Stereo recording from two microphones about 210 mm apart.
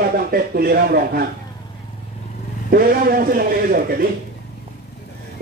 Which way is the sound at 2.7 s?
45° right (ahead or behind).